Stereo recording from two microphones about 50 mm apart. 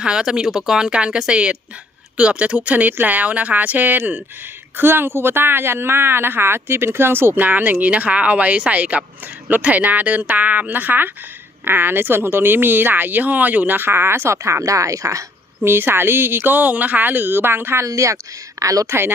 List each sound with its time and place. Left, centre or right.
0.0 s a woman's voice: centre; by 14.3 s right
14.3 s speech: right
15.6 s a woman's voice: right
17.9 s speech: right
18.9 s a woman's voice: right